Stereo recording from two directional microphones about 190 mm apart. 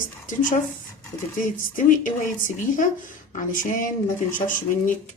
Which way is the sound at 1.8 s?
45° left (ahead or behind).